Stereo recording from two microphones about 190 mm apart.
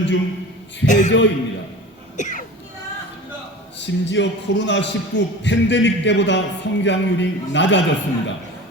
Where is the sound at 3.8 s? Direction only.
70° left (ahead or behind).